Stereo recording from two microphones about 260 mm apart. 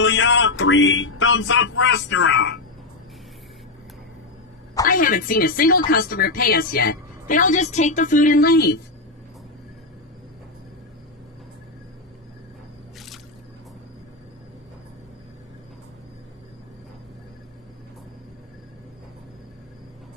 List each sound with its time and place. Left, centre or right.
0.0 s speech: left
4.8 s a woman's voice: left